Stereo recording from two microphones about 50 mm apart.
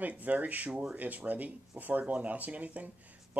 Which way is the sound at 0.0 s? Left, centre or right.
Right.